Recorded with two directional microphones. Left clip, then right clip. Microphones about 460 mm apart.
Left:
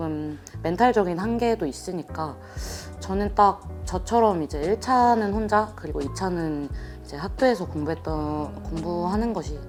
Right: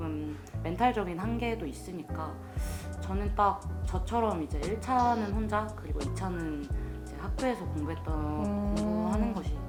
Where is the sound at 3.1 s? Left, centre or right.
Left.